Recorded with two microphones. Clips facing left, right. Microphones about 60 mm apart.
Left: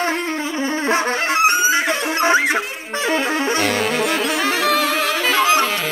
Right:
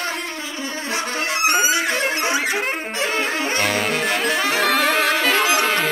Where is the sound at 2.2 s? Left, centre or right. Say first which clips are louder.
Left 5 dB; left.